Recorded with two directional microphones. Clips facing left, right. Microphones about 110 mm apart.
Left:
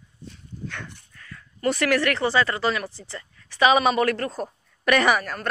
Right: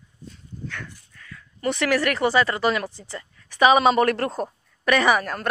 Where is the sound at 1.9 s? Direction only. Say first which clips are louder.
Right 3 dB; 10° right (ahead or behind).